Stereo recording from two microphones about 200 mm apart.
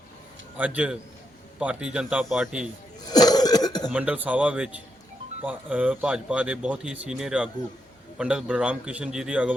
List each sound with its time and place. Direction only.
0.5 s speech: 5° right (ahead or behind)
3.1 s cough: 20° left (ahead or behind)
3.8 s speech: 5° right (ahead or behind)